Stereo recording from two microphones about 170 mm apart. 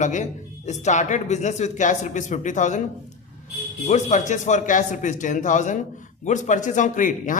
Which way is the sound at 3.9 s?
45° left (ahead or behind).